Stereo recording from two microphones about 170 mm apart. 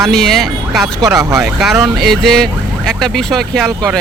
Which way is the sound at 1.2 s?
20° right (ahead or behind).